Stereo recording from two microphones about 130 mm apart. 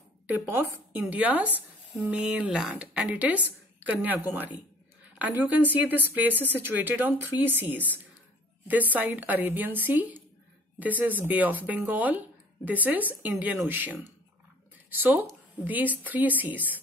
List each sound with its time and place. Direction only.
0.3 s a woman's voice: 15° right (ahead or behind)